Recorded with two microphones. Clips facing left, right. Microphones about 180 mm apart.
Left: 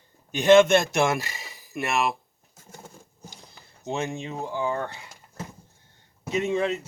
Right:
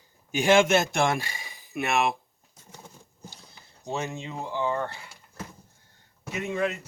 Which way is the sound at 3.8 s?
15° left (ahead or behind).